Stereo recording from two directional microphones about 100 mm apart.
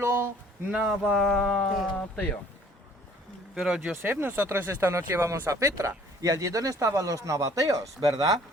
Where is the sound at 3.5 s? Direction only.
5° right (ahead or behind).